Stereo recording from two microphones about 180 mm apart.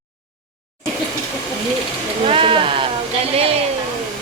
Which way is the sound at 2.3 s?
30° right (ahead or behind).